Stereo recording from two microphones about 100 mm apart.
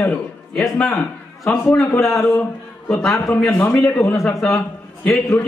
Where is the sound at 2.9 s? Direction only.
5° left (ahead or behind).